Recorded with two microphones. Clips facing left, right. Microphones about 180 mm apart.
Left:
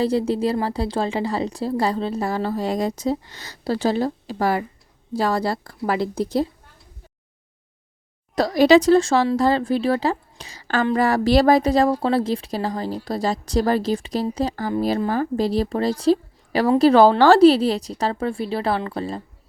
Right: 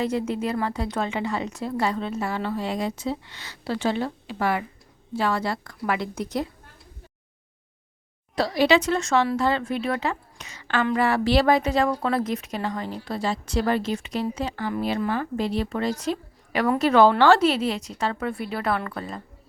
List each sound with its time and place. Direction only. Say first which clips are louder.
0.0 s speech: left 5 dB; 35° left (ahead or behind)
8.4 s speech: left 6 dB; 45° left (ahead or behind)